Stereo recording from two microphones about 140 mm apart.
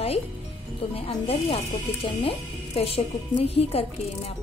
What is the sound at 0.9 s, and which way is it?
A woman's voice, 45° left (ahead or behind).